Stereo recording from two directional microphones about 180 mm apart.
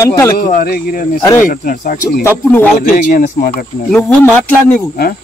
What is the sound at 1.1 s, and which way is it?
Speech, 15° left (ahead or behind).